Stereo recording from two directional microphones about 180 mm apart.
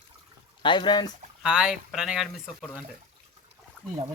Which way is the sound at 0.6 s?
25° left (ahead or behind).